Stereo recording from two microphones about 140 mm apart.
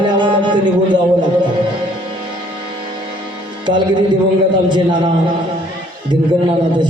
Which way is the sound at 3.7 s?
35° right (ahead or behind).